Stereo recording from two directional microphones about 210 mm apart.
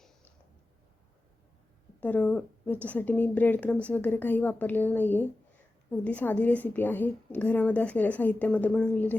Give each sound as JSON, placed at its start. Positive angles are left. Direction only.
{"t": 2.0, "sound": "a woman's voice", "side_deg": 10}